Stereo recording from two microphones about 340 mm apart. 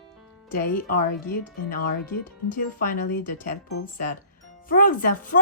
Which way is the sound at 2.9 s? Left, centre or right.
Left.